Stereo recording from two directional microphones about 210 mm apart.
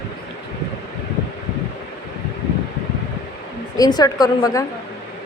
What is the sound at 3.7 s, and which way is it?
Speech, 20° left (ahead or behind).